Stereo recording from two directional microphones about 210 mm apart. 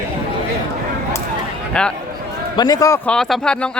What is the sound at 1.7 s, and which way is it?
Speech, 5° left (ahead or behind).